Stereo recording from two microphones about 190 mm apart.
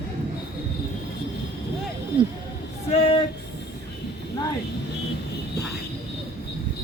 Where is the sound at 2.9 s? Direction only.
30° left (ahead or behind).